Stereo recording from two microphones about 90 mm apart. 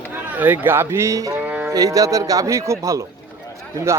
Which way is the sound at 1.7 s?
40° right (ahead or behind).